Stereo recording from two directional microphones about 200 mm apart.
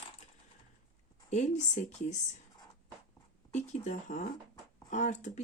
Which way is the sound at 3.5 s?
35° left (ahead or behind).